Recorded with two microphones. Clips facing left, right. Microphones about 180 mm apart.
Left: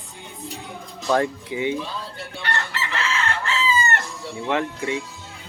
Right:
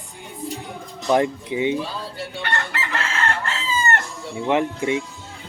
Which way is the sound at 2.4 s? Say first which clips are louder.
Even; 55° right (ahead or behind).